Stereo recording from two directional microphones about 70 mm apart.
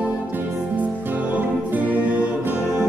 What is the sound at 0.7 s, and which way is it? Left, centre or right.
Music, right.